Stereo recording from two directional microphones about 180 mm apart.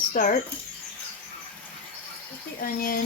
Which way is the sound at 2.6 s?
50° left (ahead or behind).